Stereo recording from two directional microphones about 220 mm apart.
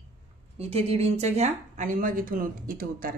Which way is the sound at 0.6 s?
30° right (ahead or behind).